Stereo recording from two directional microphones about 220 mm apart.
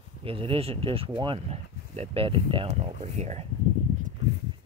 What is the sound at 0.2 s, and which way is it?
Speech, 25° right (ahead or behind).